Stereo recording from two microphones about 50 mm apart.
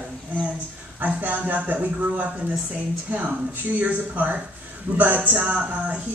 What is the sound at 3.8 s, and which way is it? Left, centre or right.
A man's voice, right.